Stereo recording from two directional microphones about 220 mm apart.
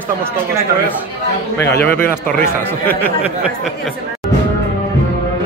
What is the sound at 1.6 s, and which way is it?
Speech, 10° left (ahead or behind).